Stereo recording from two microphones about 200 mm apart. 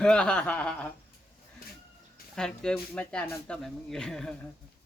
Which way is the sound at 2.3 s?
5° left (ahead or behind).